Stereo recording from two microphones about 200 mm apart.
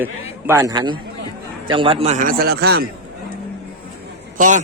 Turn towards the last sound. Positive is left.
turn(degrees=-40)  # may be behind; listen again after turning